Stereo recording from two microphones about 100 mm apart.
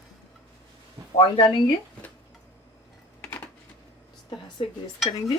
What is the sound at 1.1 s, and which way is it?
Speech, 55° left (ahead or behind).